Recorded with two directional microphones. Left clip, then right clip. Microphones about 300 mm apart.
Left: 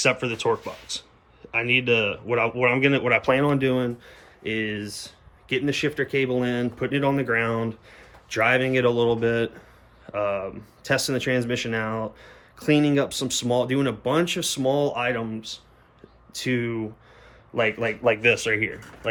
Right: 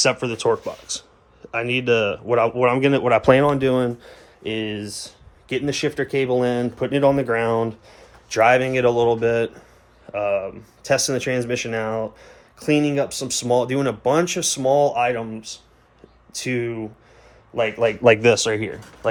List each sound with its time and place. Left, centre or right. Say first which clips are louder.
0.0 s speech: right 3 dB; centre
18.2 s speech: right 4 dB; right
18.4 s speech: right 1 dB; centre